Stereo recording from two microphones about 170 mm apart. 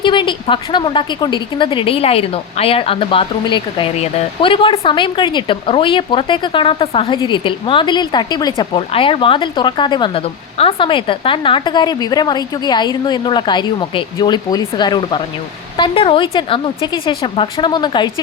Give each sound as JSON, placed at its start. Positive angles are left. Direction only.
{"t": 0.0, "sound": "a woman's voice", "side_deg": 30}